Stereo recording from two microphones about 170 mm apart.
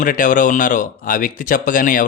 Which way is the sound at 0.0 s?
50° left (ahead or behind).